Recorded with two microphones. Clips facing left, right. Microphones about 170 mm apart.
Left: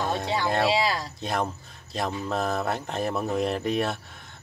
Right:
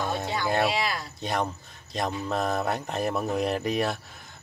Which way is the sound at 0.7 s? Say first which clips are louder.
Left 4 dB; 35° left (ahead or behind).